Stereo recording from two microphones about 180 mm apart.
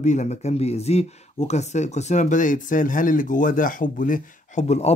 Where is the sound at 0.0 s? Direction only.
40° left (ahead or behind).